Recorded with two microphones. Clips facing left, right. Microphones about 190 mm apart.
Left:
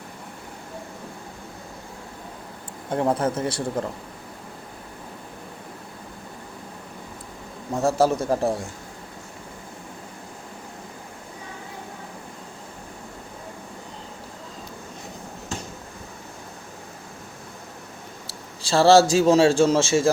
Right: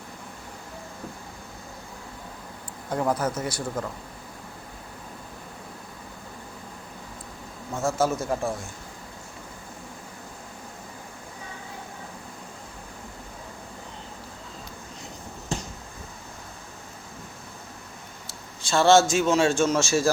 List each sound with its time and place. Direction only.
2.9 s speech: 25° left (ahead or behind)
7.7 s a man's voice: 35° left (ahead or behind)
18.3 s a man's voice: 35° left (ahead or behind)